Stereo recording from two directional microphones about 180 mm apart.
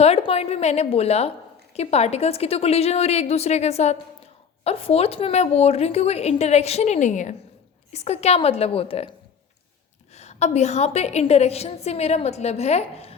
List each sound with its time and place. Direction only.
0.0 s a woman's voice: 35° left (ahead or behind)
10.2 s a woman's voice: 40° left (ahead or behind)